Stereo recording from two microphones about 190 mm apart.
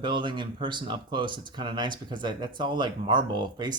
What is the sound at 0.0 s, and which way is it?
Speech, 25° right (ahead or behind).